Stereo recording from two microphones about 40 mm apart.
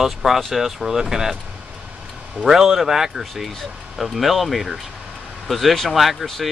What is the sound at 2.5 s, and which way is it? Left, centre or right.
Speech, centre.